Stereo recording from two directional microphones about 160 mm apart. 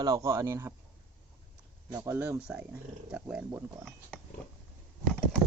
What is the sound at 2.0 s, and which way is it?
Speech, 15° right (ahead or behind).